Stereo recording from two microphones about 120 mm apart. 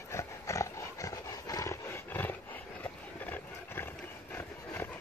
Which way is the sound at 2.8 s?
15° left (ahead or behind).